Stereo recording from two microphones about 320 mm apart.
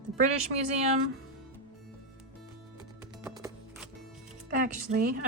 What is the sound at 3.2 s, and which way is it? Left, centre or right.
Music, centre.